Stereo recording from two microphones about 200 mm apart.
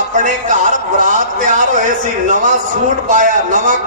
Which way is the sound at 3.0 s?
40° right (ahead or behind).